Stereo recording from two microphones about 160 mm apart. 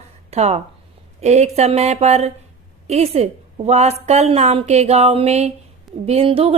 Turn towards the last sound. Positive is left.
turn(degrees=-35)  # may be behind; listen again after turning